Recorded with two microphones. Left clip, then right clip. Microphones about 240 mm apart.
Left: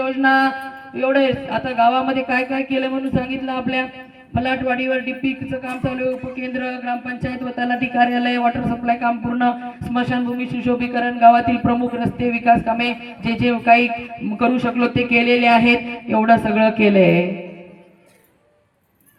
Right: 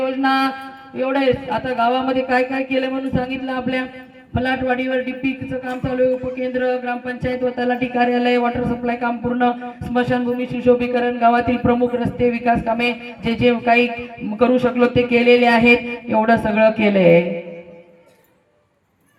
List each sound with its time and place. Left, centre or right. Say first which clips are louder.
0.0 s mantra: left 2 dB; right
0.9 s a man's voice: left 1 dB; right
6.4 s a man's voice: right 6 dB; right